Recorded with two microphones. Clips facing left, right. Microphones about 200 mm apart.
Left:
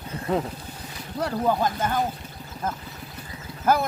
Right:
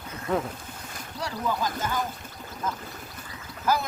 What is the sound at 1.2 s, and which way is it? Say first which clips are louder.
Speech: left 6 dB; 55° left (ahead or behind).